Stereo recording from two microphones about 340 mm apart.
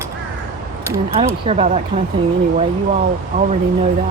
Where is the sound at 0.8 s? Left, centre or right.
Centre.